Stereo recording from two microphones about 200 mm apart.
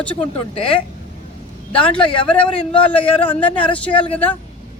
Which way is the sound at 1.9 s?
25° left (ahead or behind).